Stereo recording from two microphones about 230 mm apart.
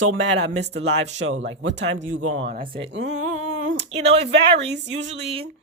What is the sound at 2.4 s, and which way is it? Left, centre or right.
Speech, right.